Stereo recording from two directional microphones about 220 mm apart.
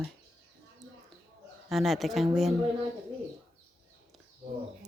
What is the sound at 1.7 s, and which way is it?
Speech, centre (ahead or behind).